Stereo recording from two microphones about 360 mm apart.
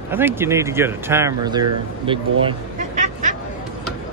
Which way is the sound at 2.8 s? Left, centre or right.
Right.